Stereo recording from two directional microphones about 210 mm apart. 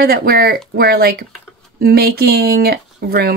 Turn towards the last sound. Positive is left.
turn(degrees=-45)  # may be behind; listen again after turning